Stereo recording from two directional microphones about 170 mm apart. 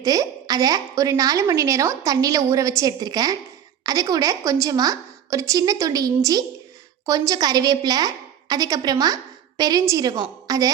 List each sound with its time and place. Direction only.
0.0 s a woman's voice: 20° right (ahead or behind)